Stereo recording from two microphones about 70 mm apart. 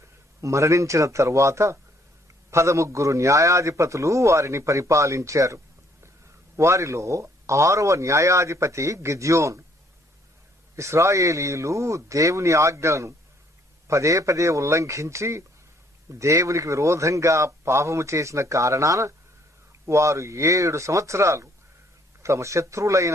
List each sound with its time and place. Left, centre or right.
0.4 s a man's voice: right
6.6 s a man's voice: right
10.8 s a man's voice: right